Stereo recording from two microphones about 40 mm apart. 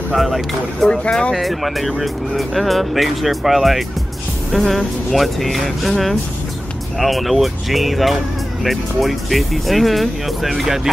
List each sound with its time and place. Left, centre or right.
0.1 s speech: centre